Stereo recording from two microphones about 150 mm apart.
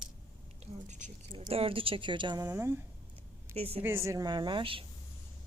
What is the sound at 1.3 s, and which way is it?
Speech, 40° right (ahead or behind).